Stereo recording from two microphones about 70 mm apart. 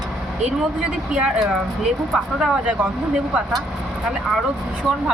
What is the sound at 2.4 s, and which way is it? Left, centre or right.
Speech, centre.